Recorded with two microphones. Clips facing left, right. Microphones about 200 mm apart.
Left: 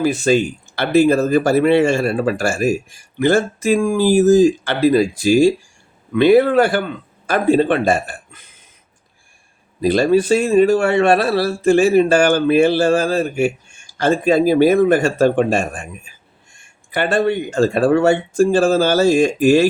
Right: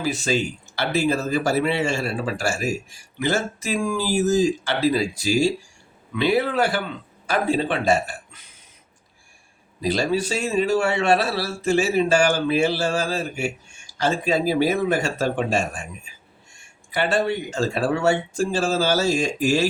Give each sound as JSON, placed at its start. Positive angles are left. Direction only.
{"t": 0.0, "sound": "a man's voice", "side_deg": 55}
{"t": 9.8, "sound": "a man's voice", "side_deg": 55}